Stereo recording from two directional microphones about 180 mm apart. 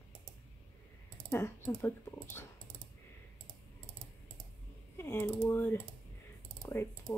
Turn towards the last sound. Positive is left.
turn(degrees=15)  # may be behind; listen again after turning